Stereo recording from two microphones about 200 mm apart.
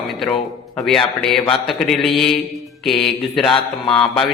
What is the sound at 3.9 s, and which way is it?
Mantra, 5° left (ahead or behind).